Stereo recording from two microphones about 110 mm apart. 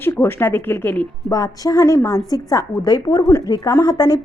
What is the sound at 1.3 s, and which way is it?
Speech, 35° left (ahead or behind).